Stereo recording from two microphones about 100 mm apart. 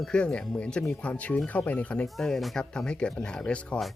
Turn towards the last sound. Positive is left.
turn(degrees=10)  # may be behind; listen again after turning